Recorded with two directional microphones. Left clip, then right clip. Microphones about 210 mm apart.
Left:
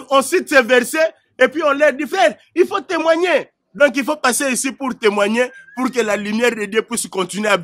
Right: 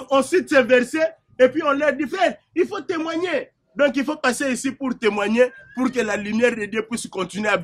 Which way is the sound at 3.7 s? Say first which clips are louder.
Left 5 dB; 55° left (ahead or behind).